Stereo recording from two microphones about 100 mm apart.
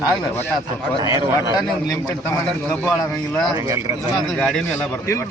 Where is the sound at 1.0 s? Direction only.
35° right (ahead or behind).